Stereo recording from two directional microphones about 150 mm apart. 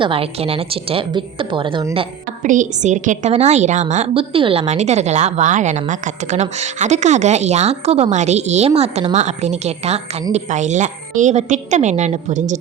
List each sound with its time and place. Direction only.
0.0 s a woman's voice: 40° right (ahead or behind)
2.4 s a woman's voice: 60° right (ahead or behind)